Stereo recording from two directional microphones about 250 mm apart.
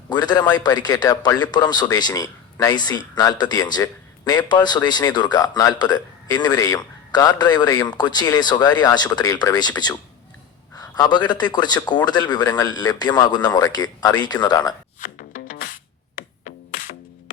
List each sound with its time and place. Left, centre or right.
0.1 s a man's voice: centre
15.0 s music: left